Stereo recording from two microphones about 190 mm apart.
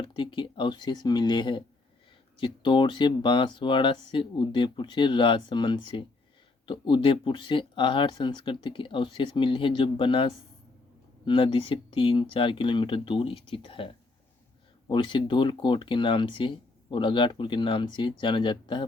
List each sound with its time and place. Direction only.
0.0 s speech: 25° left (ahead or behind)